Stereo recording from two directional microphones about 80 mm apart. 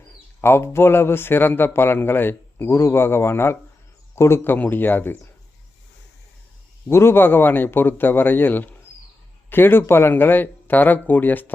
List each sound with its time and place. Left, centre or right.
0.4 s a man's voice: left
6.8 s a man's voice: left